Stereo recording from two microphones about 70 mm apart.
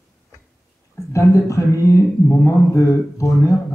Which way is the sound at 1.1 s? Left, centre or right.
Left.